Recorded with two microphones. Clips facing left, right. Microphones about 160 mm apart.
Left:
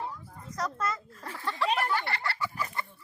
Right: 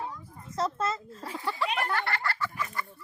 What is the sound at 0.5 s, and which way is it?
Speech, 25° right (ahead or behind).